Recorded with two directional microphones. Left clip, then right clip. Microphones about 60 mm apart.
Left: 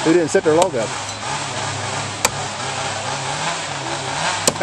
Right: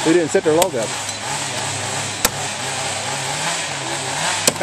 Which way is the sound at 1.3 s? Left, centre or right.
Right.